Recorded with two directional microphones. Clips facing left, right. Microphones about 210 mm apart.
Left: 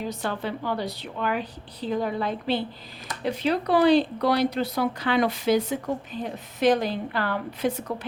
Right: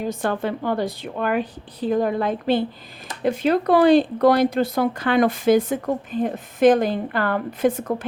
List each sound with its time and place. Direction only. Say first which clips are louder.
0.0 s speech: right 6 dB; 50° right (ahead or behind)